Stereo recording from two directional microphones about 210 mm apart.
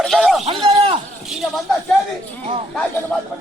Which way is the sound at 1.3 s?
Centre (ahead or behind).